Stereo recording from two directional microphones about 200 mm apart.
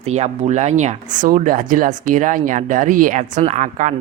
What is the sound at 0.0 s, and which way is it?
Speech, 35° right (ahead or behind).